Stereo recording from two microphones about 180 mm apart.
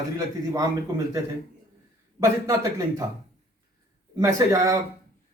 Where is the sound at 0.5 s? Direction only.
20° right (ahead or behind).